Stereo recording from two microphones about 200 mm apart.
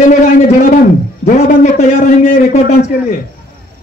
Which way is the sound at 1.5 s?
45° left (ahead or behind).